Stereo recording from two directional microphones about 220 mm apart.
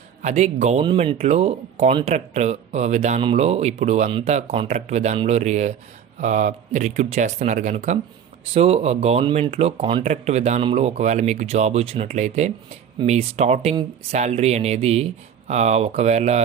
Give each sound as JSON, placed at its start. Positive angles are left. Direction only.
{"t": 0.2, "sound": "speech", "side_deg": -30}